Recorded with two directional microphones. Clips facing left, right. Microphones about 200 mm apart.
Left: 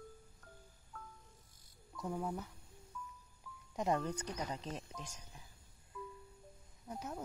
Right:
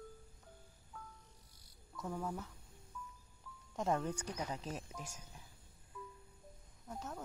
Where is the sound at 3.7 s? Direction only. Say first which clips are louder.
Left 1 dB; centre (ahead or behind).